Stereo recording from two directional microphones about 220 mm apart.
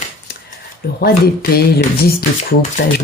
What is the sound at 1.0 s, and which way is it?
Speech, 45° left (ahead or behind).